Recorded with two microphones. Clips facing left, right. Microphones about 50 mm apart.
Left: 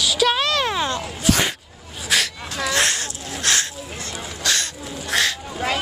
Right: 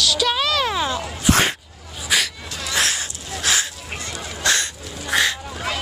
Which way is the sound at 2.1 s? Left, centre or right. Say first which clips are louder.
Even; centre.